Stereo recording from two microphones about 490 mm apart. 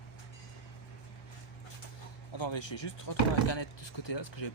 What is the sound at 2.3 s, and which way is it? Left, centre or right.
Speech, left.